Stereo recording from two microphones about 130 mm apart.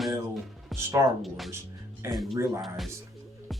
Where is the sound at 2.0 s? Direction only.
20° right (ahead or behind).